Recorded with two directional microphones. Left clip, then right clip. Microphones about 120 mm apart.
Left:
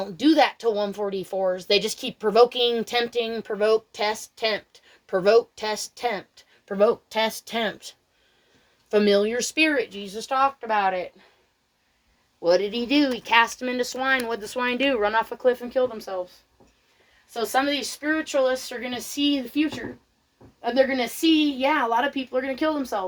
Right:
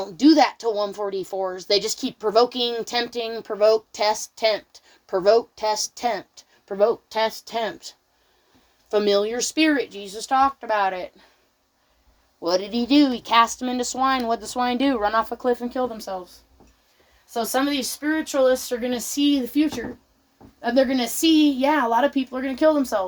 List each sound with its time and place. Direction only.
0.0 s a woman's voice: 15° right (ahead or behind)
6.7 s a woman's voice: 10° right (ahead or behind); by 11.1 s 50° right (ahead or behind)
12.4 s speech: 50° right (ahead or behind)
12.7 s a woman's voice: 25° right (ahead or behind)
15.8 s speech: 75° right (ahead or behind)
17.5 s speech: 90° right
20.6 s a woman's voice: 65° right (ahead or behind)